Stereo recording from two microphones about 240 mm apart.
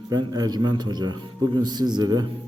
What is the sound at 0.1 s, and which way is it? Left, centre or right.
A man's voice, centre.